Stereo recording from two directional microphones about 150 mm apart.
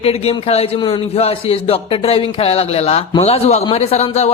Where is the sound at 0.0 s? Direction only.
40° left (ahead or behind).